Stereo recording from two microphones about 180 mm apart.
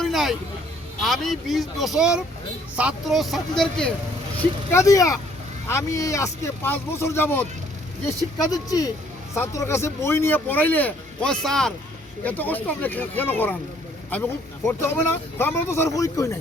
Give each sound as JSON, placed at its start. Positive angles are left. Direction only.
{"t": 0.0, "sound": "a sound", "side_deg": 0}
{"t": 1.0, "sound": "speech", "side_deg": 0}
{"t": 4.4, "sound": "speech", "side_deg": 15}